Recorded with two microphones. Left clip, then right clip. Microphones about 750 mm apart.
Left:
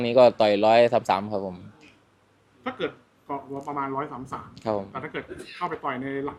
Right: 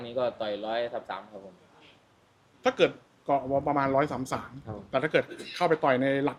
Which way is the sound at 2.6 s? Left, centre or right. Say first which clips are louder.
Right 6 dB; right.